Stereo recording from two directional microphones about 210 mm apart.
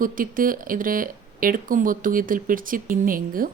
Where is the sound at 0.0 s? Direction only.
40° right (ahead or behind).